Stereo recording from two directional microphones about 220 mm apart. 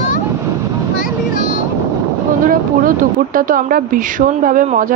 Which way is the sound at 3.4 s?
40° right (ahead or behind).